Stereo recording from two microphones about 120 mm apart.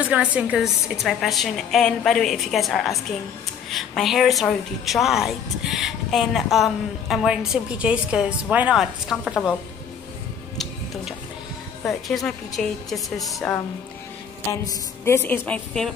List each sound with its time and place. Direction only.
0.0 s a woman's voice: 10° right (ahead or behind)
1.0 s a woman's voice: centre (ahead or behind)
11.8 s a woman's voice: centre (ahead or behind)
14.5 s a woman's voice: 30° left (ahead or behind)
15.1 s a woman's voice: 15° left (ahead or behind)